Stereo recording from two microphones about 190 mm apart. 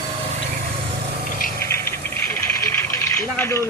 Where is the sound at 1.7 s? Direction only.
10° left (ahead or behind).